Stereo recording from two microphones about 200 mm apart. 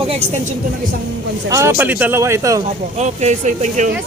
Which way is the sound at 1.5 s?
15° right (ahead or behind).